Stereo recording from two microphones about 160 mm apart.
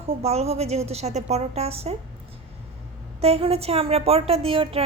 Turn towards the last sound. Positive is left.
turn(degrees=-35)  # may be behind; listen again after turning